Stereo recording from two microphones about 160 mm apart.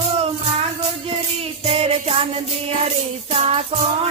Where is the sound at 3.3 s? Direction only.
40° right (ahead or behind).